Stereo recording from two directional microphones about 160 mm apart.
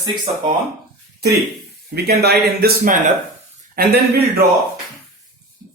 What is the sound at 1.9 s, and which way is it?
A man's voice, 85° right.